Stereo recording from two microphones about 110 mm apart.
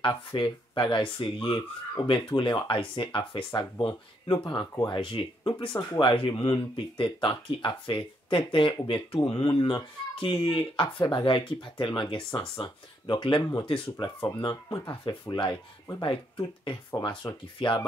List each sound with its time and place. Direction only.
0.0 s speech: 50° left (ahead or behind)